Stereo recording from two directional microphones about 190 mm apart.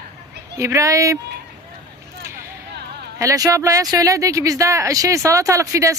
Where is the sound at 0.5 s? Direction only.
15° right (ahead or behind).